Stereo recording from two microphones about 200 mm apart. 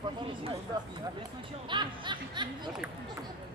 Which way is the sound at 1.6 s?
25° right (ahead or behind).